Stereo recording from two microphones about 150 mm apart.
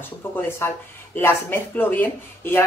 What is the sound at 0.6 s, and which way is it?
Speech, 15° left (ahead or behind).